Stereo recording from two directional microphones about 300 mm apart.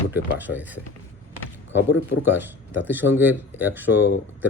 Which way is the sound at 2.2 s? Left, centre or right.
Centre.